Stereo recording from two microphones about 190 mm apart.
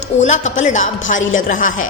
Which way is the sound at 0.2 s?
40° left (ahead or behind).